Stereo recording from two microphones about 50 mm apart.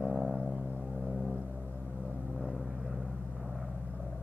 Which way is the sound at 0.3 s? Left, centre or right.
Right.